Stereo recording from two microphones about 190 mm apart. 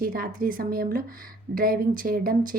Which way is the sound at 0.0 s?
50° right (ahead or behind).